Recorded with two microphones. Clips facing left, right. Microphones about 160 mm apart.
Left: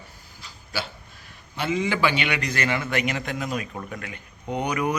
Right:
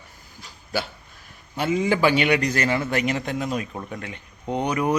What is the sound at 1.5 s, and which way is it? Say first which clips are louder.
A man's voice: right 3 dB; 40° right (ahead or behind).